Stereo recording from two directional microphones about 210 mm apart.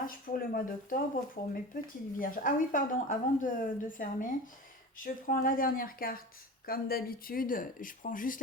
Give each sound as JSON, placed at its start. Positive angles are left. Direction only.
{"t": 0.0, "sound": "a woman's voice", "side_deg": 45}